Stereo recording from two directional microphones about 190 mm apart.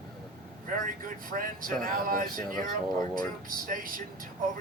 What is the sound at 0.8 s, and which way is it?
Speech, 45° right (ahead or behind).